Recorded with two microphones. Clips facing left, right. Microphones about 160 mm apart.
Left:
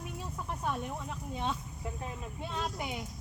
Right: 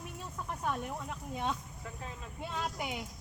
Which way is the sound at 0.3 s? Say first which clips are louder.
Even; 5° left (ahead or behind).